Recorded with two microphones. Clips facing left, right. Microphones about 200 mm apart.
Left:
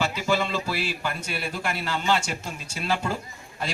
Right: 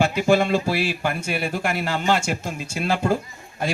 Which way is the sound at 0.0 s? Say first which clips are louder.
Right 7 dB; 55° right (ahead or behind).